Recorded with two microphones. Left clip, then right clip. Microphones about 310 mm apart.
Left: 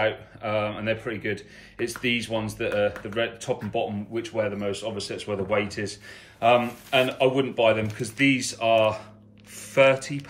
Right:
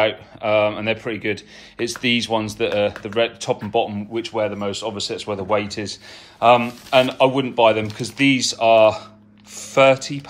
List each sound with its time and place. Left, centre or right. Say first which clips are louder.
0.0 s speech: right 6 dB; centre